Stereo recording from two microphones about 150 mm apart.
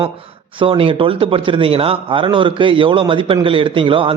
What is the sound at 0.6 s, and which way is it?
A man's voice, 35° right (ahead or behind).